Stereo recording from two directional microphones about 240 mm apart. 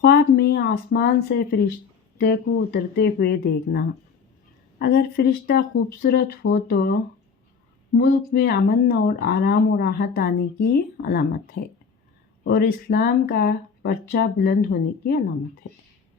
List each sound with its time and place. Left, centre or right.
0.0 s speech: left